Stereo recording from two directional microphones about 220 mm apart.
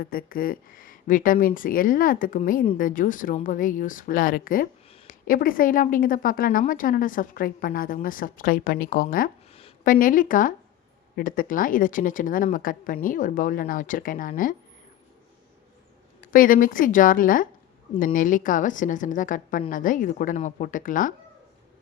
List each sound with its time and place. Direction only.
0.0 s speech: 40° left (ahead or behind)
16.2 s speech: 40° left (ahead or behind)